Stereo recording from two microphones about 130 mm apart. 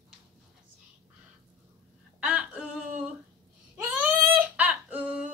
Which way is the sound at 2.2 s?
10° right (ahead or behind).